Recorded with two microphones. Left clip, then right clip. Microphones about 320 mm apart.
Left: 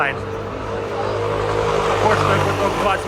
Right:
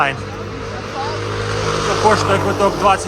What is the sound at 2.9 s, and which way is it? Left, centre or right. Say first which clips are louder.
Speech: right 7 dB; centre.